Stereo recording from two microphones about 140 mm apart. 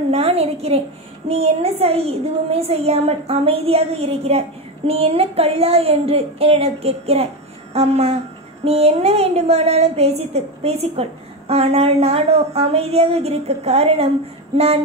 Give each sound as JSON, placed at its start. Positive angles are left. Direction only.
{"t": 0.1, "sound": "a woman's voice", "side_deg": -45}